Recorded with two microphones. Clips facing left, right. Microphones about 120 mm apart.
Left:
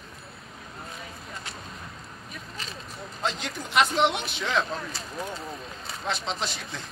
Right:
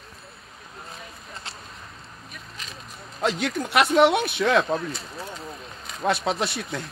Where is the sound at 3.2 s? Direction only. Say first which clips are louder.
Right 7 dB; 65° right (ahead or behind).